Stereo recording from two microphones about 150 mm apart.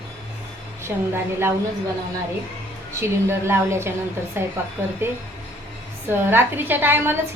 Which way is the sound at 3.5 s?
15° right (ahead or behind).